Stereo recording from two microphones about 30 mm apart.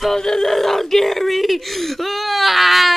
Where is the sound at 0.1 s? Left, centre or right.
Centre.